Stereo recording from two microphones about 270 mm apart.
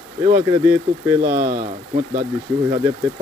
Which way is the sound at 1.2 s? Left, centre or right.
Right.